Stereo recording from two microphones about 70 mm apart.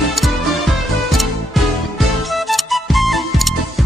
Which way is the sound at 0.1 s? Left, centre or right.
Centre.